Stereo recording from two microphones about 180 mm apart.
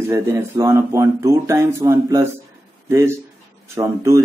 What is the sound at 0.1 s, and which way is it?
Speech, 15° right (ahead or behind).